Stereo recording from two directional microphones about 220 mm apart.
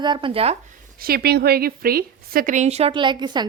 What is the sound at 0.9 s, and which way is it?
A woman's voice, 45° right (ahead or behind).